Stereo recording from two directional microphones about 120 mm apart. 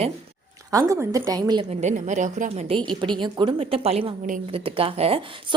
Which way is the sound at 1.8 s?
90° right.